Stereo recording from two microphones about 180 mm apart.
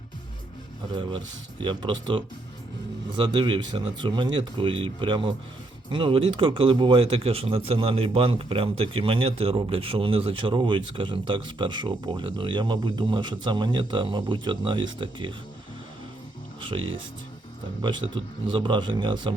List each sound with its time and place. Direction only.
1.6 s a man's voice: 25° right (ahead or behind)
16.6 s speech: 30° right (ahead or behind)
17.8 s a man's voice: 25° right (ahead or behind)